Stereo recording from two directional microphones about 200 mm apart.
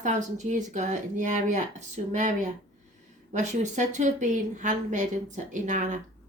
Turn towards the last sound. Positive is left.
turn(degrees=-40)  # may be behind; listen again after turning